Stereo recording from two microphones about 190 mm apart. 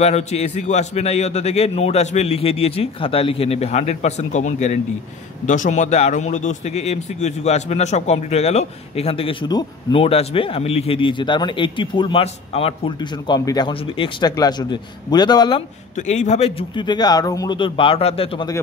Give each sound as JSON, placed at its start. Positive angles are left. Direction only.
{"t": 0.0, "sound": "a man's voice", "side_deg": 35}
{"t": 16.0, "sound": "a man's voice", "side_deg": 35}